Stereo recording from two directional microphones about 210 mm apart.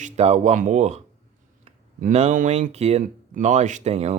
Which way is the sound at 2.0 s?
35° right (ahead or behind).